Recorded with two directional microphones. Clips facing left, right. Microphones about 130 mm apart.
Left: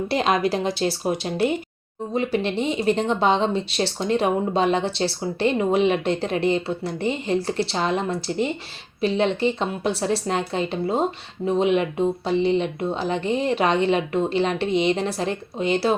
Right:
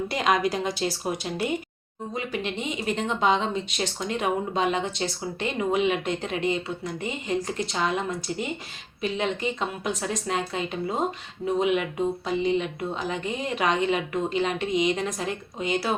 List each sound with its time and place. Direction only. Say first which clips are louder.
0.1 s a woman's voice: left 3 dB; 30° left (ahead or behind)